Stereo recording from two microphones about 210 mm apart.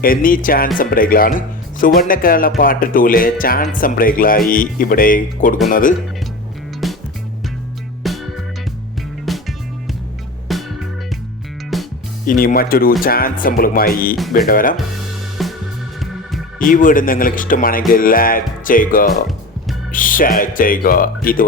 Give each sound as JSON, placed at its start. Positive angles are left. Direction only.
{"t": 0.0, "sound": "speech", "side_deg": 40}
{"t": 6.8, "sound": "music", "side_deg": 0}
{"t": 8.0, "sound": "music", "side_deg": 0}
{"t": 10.5, "sound": "music", "side_deg": 0}
{"t": 12.2, "sound": "speech", "side_deg": 40}
{"t": 15.4, "sound": "music", "side_deg": 0}
{"t": 16.0, "sound": "organ", "side_deg": 0}
{"t": 16.6, "sound": "speech", "side_deg": 40}